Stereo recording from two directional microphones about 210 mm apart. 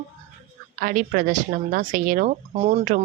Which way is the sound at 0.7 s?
40° right (ahead or behind).